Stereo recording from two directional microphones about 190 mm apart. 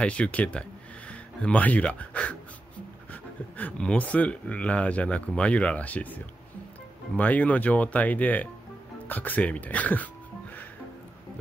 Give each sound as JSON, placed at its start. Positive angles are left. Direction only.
{"t": 0.0, "sound": "speech", "side_deg": 5}